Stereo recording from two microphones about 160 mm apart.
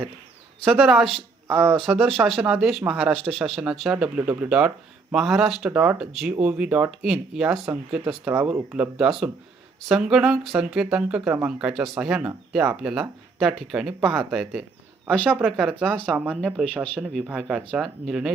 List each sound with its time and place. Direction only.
0.6 s a man's voice: centre (ahead or behind)